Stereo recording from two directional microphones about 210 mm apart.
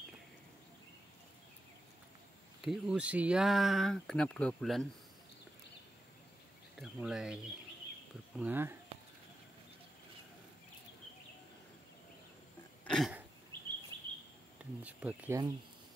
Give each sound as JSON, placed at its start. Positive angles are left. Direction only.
{"t": 2.6, "sound": "speech", "side_deg": 0}
{"t": 6.8, "sound": "speech", "side_deg": -5}
{"t": 8.4, "sound": "speech", "side_deg": -10}
{"t": 12.8, "sound": "cough", "side_deg": 5}
{"t": 13.5, "sound": "chirp", "side_deg": -25}
{"t": 13.9, "sound": "a sound", "side_deg": -20}
{"t": 14.8, "sound": "speech", "side_deg": -5}